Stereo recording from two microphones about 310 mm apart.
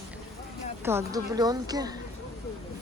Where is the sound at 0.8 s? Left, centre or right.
Centre.